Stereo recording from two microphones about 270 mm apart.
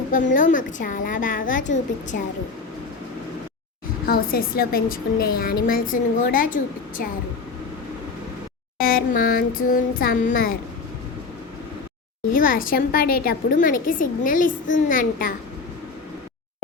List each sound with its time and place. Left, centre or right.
0.1 s a woman's voice: left
4.0 s a woman's voice: left
8.8 s a woman's voice: left
12.3 s a woman's voice: left